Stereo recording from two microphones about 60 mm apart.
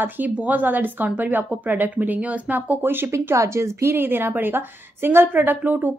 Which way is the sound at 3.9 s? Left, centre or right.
Right.